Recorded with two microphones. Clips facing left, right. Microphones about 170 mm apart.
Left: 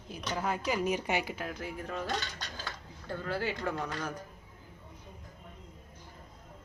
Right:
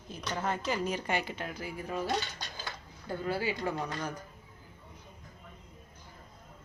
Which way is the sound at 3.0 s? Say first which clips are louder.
Right 2 dB; 10° right (ahead or behind).